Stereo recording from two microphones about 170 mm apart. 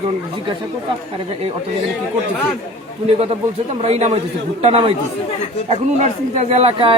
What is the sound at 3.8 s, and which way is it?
A man's voice, 40° right (ahead or behind).